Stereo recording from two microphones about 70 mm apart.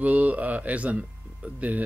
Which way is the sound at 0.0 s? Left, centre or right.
Right.